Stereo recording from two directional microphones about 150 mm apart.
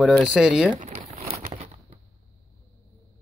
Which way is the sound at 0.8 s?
40° right (ahead or behind).